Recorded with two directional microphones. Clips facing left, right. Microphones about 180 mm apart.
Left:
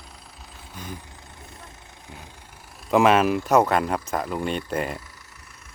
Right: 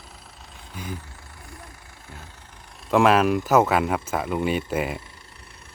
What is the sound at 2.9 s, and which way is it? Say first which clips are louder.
Speech: even; centre (ahead or behind).